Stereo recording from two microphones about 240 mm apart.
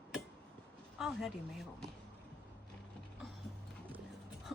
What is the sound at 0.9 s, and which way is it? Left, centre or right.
Speech, centre.